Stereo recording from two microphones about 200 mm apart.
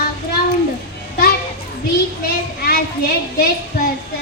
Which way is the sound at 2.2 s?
50° left (ahead or behind).